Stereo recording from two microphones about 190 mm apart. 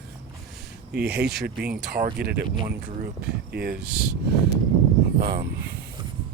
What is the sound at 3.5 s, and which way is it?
Speech, 55° right (ahead or behind).